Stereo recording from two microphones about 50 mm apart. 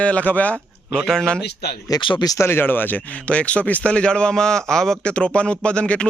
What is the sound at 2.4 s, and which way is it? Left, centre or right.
Speech, left.